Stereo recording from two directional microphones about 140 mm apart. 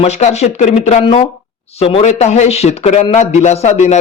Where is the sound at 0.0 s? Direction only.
50° left (ahead or behind).